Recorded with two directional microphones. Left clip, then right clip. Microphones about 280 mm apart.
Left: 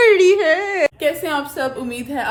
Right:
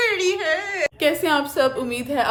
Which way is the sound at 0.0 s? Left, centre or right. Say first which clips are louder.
Left 9 dB; centre.